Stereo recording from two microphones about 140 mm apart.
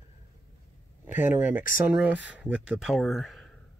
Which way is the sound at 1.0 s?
15° right (ahead or behind).